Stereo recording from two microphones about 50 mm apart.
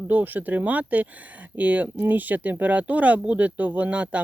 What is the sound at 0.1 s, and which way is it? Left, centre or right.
Speech, right.